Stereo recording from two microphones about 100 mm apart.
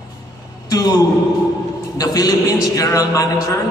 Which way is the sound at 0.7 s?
35° left (ahead or behind).